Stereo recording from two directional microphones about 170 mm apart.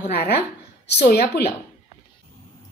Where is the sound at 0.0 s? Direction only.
70° left (ahead or behind).